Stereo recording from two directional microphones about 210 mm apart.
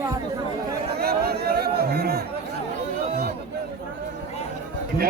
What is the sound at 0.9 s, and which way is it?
Chatter, 50° right (ahead or behind).